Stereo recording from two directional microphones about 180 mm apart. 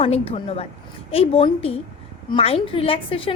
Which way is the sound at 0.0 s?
30° left (ahead or behind).